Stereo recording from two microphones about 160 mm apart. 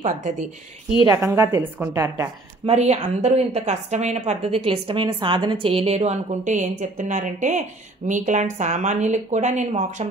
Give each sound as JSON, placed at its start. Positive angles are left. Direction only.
{"t": 0.0, "sound": "a woman's voice", "side_deg": -50}
{"t": 1.0, "sound": "a woman's voice", "side_deg": -20}
{"t": 2.6, "sound": "a woman's voice", "side_deg": -45}